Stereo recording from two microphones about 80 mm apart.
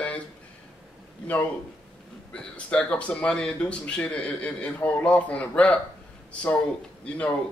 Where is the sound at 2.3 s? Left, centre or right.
Centre.